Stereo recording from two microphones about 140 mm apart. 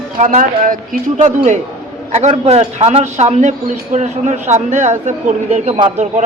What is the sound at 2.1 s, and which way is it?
A man's voice, 50° right (ahead or behind).